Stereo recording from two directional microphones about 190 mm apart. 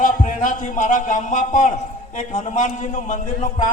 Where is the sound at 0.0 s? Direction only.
45° left (ahead or behind).